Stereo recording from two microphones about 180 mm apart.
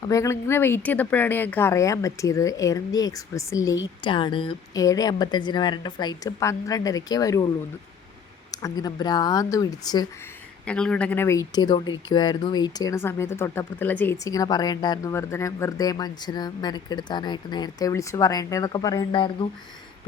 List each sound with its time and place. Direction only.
0.0 s speech: 15° left (ahead or behind)
8.6 s speech: 20° left (ahead or behind)
10.7 s speech: 5° left (ahead or behind); by 19.5 s 25° left (ahead or behind)